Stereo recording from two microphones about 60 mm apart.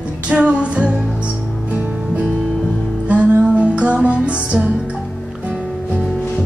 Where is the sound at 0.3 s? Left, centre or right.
Centre.